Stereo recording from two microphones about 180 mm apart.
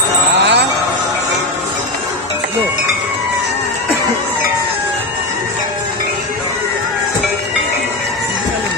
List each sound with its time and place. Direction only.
0.4 s music: 75° right (ahead or behind)